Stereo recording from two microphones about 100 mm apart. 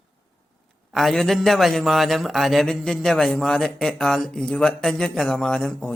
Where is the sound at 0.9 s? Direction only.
Centre (ahead or behind).